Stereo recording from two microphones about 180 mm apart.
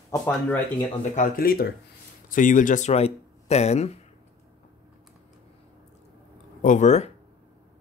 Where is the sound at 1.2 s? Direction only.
55° left (ahead or behind); by 3.9 s 35° left (ahead or behind).